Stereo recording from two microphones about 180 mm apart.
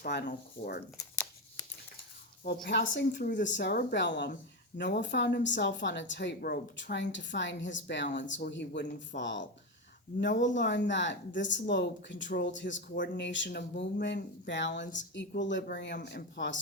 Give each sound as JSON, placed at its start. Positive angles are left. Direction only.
{"t": 0.0, "sound": "a woman's voice", "side_deg": 70}
{"t": 0.3, "sound": "speech", "side_deg": 55}
{"t": 2.4, "sound": "a woman's voice", "side_deg": 70}
{"t": 3.4, "sound": "a woman's voice", "side_deg": 80}
{"t": 6.9, "sound": "a woman's voice", "side_deg": 80}